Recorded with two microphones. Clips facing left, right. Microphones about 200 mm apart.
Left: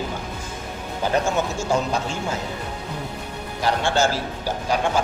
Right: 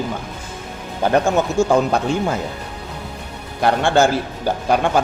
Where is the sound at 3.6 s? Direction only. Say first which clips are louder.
Right 6 dB; 55° right (ahead or behind).